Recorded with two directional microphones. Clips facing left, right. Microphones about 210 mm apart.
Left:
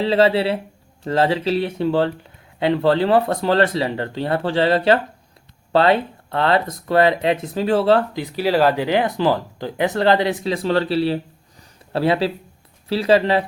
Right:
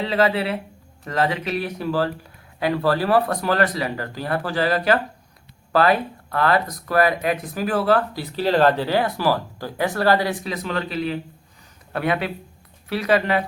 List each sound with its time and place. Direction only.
0.0 s speech: 30° left (ahead or behind)